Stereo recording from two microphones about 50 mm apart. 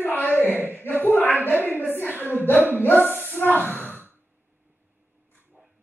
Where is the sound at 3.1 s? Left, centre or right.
Left.